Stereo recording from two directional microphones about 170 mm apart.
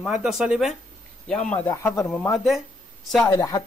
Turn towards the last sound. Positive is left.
turn(degrees=20)  # may be behind; listen again after turning